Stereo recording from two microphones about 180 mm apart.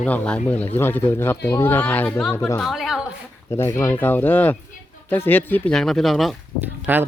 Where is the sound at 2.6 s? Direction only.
Centre (ahead or behind).